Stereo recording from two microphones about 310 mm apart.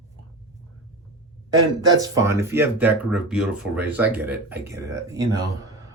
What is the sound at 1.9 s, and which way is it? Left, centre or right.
Speech, centre.